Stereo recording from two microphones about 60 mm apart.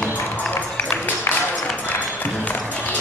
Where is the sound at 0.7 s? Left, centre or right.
Left.